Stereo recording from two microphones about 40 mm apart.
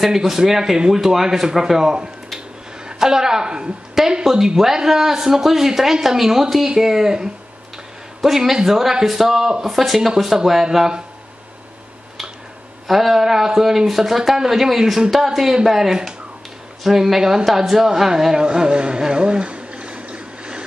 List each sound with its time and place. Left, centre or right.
0.0 s speech: centre
12.8 s speech: centre
18.3 s a sound: centre